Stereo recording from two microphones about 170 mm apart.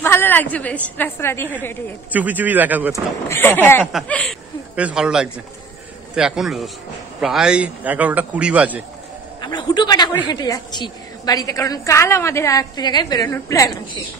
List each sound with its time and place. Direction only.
0.0 s a woman's voice: 15° left (ahead or behind)
2.1 s a man's voice: 10° right (ahead or behind)
2.9 s a woman's voice: 15° left (ahead or behind)
4.7 s a man's voice: 5° right (ahead or behind)
9.4 s a man's voice: 25° left (ahead or behind)